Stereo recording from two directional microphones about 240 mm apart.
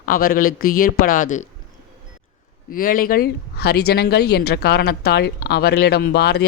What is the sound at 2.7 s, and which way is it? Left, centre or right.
Speech, left.